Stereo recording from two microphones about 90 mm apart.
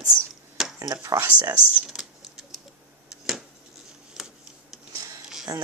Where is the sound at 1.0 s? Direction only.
35° right (ahead or behind).